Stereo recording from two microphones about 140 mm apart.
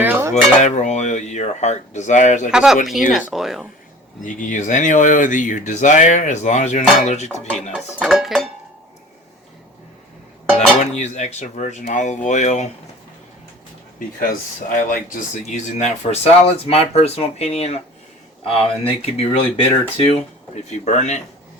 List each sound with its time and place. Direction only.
0.0 s dishes: 15° right (ahead or behind)
0.6 s speech: 60° left (ahead or behind)
2.5 s speech: 5° right (ahead or behind)
4.2 s speech: 65° left (ahead or behind)
7.9 s speech: 5° right (ahead or behind)
10.8 s speech: 55° left (ahead or behind)
14.2 s speech: 80° left; by 19.6 s 45° left (ahead or behind)
20.7 s speech: 55° left (ahead or behind)